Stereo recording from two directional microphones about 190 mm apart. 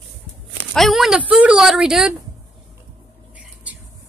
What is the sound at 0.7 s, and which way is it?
A woman's voice, centre (ahead or behind).